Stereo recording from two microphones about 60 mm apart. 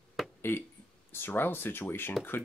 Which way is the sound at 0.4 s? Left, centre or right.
Left.